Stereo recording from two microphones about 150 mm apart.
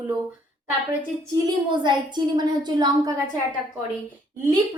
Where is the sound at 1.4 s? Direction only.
30° right (ahead or behind).